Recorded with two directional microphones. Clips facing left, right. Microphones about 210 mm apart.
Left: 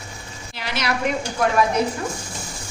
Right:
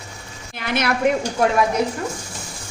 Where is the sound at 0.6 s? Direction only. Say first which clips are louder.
Right 4 dB; 55° right (ahead or behind).